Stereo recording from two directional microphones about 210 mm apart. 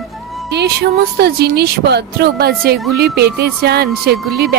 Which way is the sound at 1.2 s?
50° right (ahead or behind).